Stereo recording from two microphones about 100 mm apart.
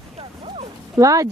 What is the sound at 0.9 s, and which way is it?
Speech, 35° right (ahead or behind).